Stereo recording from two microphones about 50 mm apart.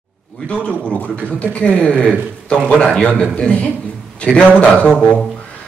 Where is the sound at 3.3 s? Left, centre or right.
Left.